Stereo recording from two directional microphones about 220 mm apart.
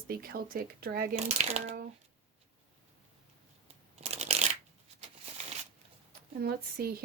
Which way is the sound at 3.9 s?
30° right (ahead or behind).